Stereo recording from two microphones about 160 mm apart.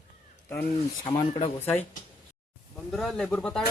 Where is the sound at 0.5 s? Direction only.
10° left (ahead or behind).